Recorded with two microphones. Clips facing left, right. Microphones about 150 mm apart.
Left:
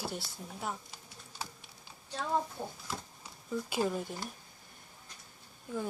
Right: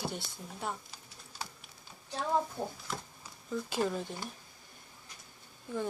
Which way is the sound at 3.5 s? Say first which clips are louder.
Even; 10° left (ahead or behind).